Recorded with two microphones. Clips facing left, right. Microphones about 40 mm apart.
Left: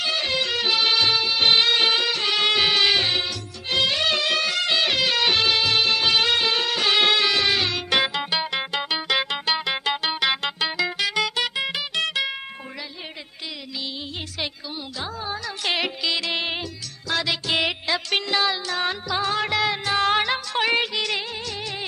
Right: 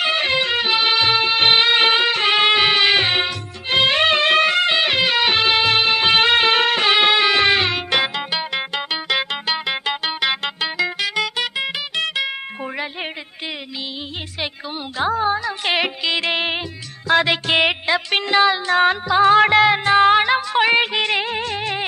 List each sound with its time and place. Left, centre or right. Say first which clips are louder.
0.0 s music: right 6 dB; right
10.3 s music: right 2 dB; right
15.0 s music: right 13 dB; right
15.3 s music: right 5 dB; right
20.8 s music: right 6 dB; right